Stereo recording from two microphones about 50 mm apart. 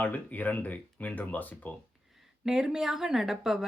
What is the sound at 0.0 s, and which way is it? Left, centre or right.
Speech, left.